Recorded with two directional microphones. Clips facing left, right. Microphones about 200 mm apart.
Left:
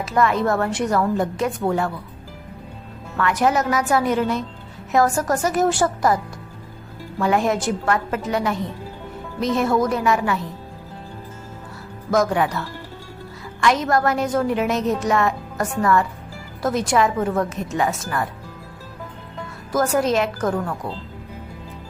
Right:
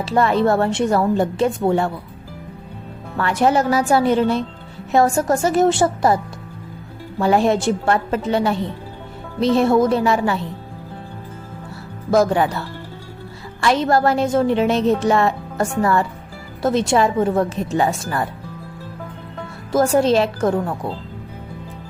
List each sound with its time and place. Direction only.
0.0 s a woman's voice: 30° right (ahead or behind)
3.2 s a woman's voice: 30° right (ahead or behind)
7.2 s a woman's voice: 30° right (ahead or behind)
12.1 s a woman's voice: 30° right (ahead or behind)
19.7 s a woman's voice: 30° right (ahead or behind)